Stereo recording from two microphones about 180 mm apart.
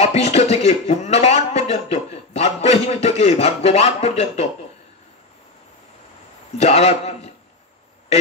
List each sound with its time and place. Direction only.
0.0 s a man's voice: 35° left (ahead or behind)
6.6 s a man's voice: 35° left (ahead or behind)